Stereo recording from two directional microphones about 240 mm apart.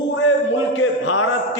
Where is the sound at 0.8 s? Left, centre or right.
Left.